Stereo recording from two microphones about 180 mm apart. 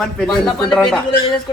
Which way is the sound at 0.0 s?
Centre (ahead or behind).